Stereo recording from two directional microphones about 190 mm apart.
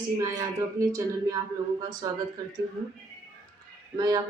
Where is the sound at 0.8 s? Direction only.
15° right (ahead or behind).